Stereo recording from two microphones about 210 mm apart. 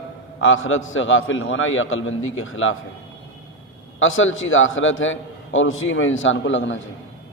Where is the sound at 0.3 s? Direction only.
65° left (ahead or behind).